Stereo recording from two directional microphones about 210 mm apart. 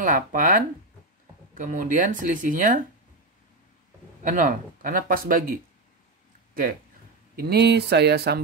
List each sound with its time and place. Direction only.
0.0 s speech: 40° right (ahead or behind)
4.2 s speech: 40° right (ahead or behind)
7.3 s speech: 50° right (ahead or behind)